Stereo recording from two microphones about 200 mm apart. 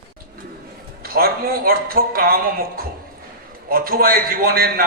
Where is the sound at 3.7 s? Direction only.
45° right (ahead or behind).